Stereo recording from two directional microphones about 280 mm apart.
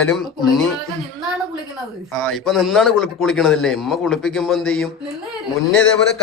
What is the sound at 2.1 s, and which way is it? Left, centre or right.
A man's voice, centre.